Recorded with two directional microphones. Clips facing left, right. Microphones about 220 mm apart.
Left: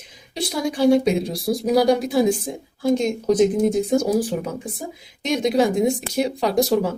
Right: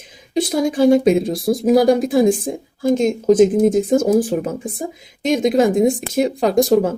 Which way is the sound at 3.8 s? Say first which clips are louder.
Right 4 dB; 50° right (ahead or behind).